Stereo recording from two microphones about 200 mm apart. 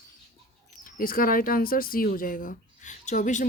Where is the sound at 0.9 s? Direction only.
45° left (ahead or behind).